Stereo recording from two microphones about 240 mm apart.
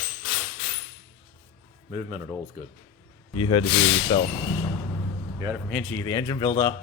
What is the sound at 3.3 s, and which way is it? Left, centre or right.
Speech, centre.